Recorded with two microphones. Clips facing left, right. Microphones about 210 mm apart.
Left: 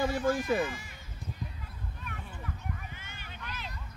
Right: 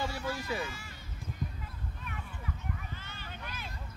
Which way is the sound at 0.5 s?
50° left (ahead or behind).